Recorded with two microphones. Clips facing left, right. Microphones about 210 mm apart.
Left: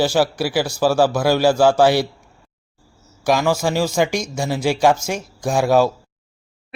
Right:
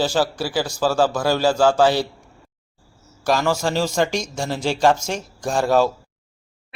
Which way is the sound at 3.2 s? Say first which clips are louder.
Left 2 dB; 10° left (ahead or behind).